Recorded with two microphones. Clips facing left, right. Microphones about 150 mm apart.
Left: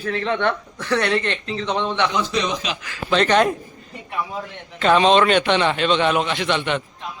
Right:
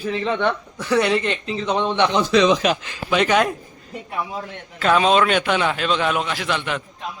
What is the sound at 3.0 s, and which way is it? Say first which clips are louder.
Speech: left 1 dB; 10° right (ahead or behind).